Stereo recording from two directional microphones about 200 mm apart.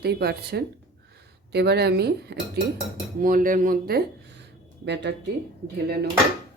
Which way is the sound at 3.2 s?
45° right (ahead or behind).